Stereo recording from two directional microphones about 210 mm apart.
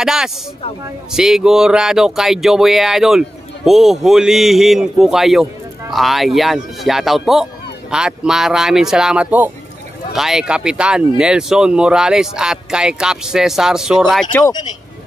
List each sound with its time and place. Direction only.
0.0 s speech: centre (ahead or behind)
14.3 s speech: 20° left (ahead or behind)